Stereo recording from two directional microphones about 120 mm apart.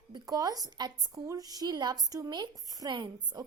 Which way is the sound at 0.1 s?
30° right (ahead or behind).